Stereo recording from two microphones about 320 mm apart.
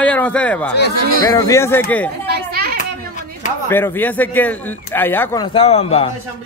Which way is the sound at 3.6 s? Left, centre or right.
Centre.